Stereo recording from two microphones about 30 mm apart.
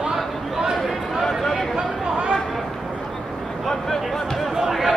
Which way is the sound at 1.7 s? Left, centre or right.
Right.